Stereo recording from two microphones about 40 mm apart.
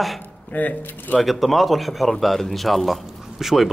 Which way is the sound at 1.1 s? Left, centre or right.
Centre.